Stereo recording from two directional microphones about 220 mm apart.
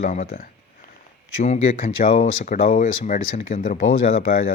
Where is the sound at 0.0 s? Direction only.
35° left (ahead or behind).